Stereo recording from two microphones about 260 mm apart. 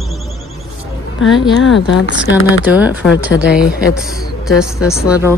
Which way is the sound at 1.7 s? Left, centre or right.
Left.